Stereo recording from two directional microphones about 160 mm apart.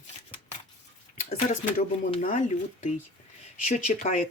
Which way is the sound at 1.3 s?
50° left (ahead or behind).